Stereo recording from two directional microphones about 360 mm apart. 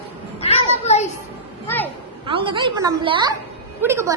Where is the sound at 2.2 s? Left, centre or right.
Centre.